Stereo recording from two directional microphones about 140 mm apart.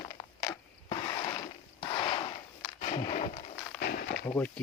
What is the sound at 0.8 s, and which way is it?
Mechanisms, 35° left (ahead or behind).